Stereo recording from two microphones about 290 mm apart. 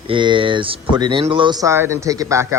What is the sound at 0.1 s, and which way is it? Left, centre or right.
Speech, centre.